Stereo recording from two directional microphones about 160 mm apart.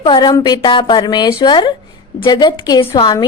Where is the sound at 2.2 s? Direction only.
25° left (ahead or behind).